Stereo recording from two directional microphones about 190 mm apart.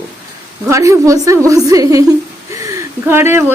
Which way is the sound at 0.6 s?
15° right (ahead or behind).